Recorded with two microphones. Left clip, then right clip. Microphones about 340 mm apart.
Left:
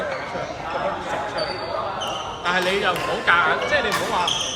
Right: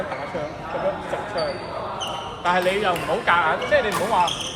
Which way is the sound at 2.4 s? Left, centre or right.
Centre.